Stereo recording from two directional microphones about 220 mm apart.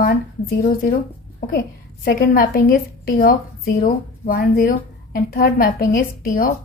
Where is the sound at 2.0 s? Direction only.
40° left (ahead or behind).